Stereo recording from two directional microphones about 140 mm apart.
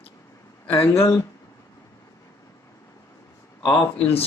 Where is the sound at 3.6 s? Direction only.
35° left (ahead or behind).